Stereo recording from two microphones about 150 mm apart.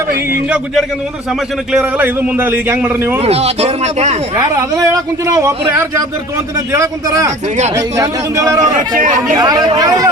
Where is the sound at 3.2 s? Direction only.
45° right (ahead or behind).